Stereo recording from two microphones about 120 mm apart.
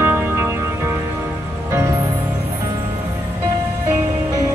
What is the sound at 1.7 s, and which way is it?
Music, 20° right (ahead or behind).